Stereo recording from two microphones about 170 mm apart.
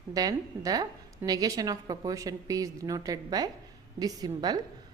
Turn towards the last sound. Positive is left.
turn(degrees=-20)  # may be behind; listen again after turning